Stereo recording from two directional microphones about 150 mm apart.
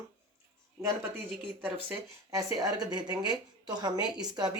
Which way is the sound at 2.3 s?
25° right (ahead or behind).